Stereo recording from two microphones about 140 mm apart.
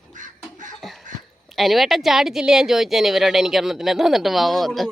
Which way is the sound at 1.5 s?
Centre (ahead or behind).